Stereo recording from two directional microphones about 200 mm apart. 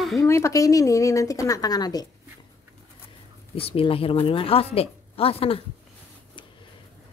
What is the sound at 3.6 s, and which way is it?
A woman's voice, 30° left (ahead or behind).